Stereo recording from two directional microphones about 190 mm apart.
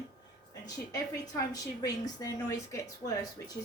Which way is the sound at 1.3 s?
20° left (ahead or behind).